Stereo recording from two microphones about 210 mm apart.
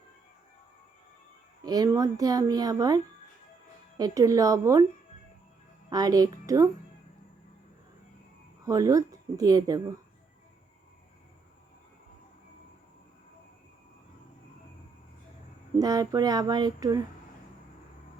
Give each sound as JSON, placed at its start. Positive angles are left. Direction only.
{"t": 1.6, "sound": "a woman's voice", "side_deg": -20}
{"t": 5.9, "sound": "a woman's voice", "side_deg": -15}
{"t": 8.6, "sound": "a woman's voice", "side_deg": -15}
{"t": 15.8, "sound": "a woman's voice", "side_deg": -15}